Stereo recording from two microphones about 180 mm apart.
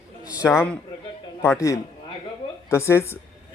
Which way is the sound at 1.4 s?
15° left (ahead or behind).